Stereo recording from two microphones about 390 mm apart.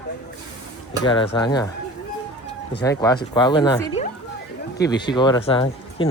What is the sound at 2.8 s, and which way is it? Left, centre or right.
Speech, centre.